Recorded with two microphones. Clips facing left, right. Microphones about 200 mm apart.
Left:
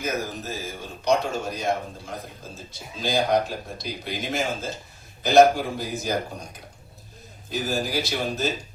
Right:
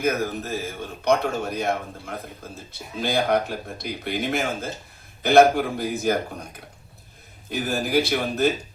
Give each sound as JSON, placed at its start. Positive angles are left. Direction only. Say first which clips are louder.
{"t": 0.0, "sound": "a man's voice", "louder": "right 5 dB", "side_deg": -55}
{"t": 7.5, "sound": "a man's voice", "louder": "right 3 dB", "side_deg": -55}